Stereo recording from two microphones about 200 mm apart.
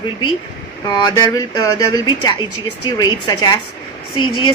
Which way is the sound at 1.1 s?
20° left (ahead or behind).